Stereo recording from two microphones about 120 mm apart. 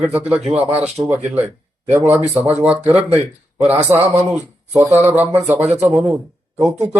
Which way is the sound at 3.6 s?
15° right (ahead or behind).